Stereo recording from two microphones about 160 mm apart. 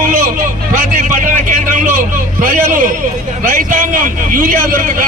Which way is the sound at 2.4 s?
55° right (ahead or behind).